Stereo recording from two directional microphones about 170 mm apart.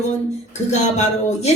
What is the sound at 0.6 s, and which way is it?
Speech, 40° left (ahead or behind).